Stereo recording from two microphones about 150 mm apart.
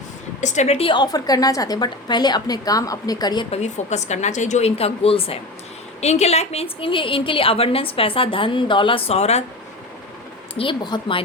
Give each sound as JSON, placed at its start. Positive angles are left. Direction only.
{"t": 0.4, "sound": "a woman's voice", "side_deg": 50}
{"t": 3.5, "sound": "a woman's voice", "side_deg": 50}
{"t": 10.6, "sound": "a woman's voice", "side_deg": 30}